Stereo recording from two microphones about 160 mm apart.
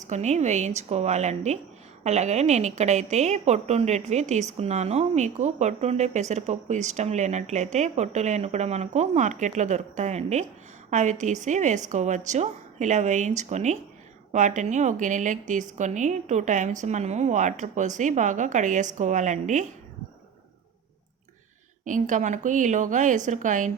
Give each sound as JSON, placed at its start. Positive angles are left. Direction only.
{"t": 0.0, "sound": "speech", "side_deg": -45}
{"t": 21.8, "sound": "speech", "side_deg": -50}